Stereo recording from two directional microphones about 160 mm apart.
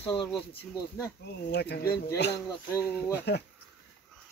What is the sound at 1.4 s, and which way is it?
Speech, 90° left.